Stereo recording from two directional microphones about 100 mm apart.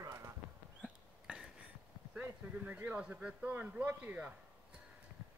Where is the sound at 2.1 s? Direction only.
15° right (ahead or behind).